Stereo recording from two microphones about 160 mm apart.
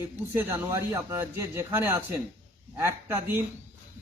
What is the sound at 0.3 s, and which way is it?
Speech, 15° right (ahead or behind).